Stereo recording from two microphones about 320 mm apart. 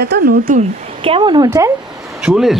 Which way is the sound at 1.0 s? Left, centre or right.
Centre.